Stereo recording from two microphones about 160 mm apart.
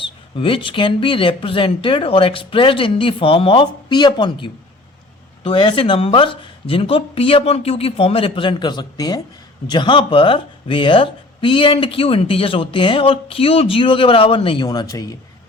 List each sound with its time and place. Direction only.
0.0 s speech: 35° left (ahead or behind)